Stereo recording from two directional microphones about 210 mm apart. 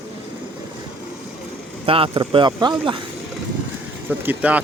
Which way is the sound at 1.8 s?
25° right (ahead or behind).